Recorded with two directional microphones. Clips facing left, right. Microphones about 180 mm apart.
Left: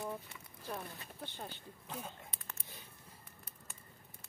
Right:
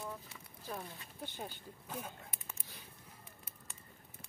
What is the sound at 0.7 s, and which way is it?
Speech, 10° right (ahead or behind).